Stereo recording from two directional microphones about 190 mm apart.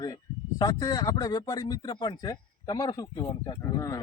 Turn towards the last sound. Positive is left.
turn(degrees=20)  # may be behind; listen again after turning